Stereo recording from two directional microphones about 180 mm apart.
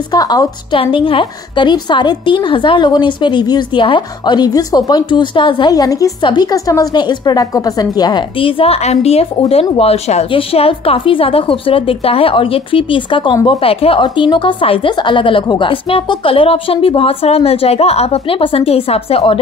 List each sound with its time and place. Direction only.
0.1 s a woman's voice: 20° left (ahead or behind)